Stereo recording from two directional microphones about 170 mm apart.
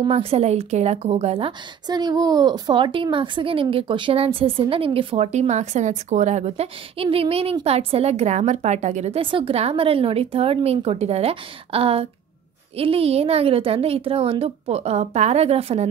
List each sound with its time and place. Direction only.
0.0 s a woman's voice: 35° right (ahead or behind)